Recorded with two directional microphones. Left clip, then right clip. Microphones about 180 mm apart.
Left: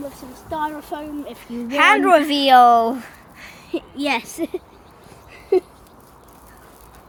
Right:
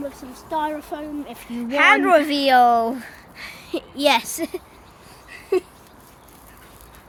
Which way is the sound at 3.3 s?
15° right (ahead or behind).